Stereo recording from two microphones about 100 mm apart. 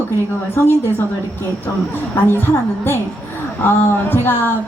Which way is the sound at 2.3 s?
20° left (ahead or behind).